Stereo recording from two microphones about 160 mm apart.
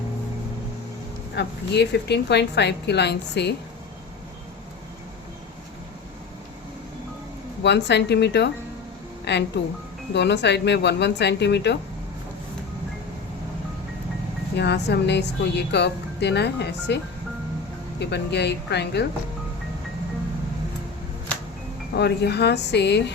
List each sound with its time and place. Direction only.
1.4 s a woman's voice: 90° left
7.6 s a woman's voice: 90° left
14.5 s a woman's voice: 90° left
18.0 s a woman's voice: 90° left
21.9 s a woman's voice: 90° left